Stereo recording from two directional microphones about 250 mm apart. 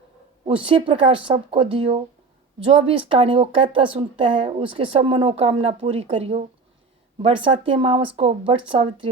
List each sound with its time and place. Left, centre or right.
0.4 s speech: right